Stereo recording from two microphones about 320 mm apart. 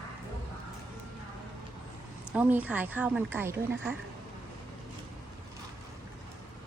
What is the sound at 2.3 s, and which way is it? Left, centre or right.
Speech, centre.